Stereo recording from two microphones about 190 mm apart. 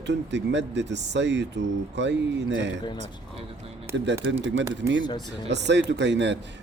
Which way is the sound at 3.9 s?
65° right (ahead or behind).